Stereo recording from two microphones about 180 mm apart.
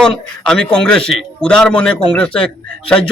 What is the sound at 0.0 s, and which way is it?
A man's voice, 5° left (ahead or behind).